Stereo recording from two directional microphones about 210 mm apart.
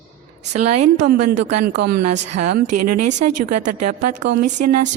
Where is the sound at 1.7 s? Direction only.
50° right (ahead or behind).